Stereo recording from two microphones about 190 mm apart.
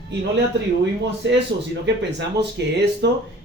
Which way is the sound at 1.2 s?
70° right (ahead or behind).